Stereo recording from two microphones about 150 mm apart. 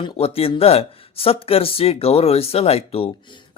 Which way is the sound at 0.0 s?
40° left (ahead or behind).